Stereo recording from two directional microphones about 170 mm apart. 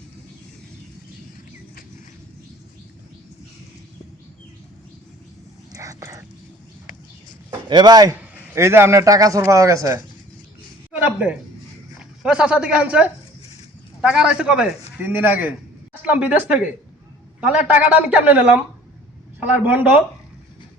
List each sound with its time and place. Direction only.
5.7 s whispering: 20° right (ahead or behind)
7.7 s a man's voice: 25° right (ahead or behind)
11.0 s a sound: 5° right (ahead or behind)
11.9 s a man's voice: 5° right (ahead or behind)